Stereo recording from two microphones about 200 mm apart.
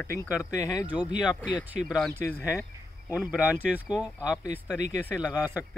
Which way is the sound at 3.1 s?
5° right (ahead or behind).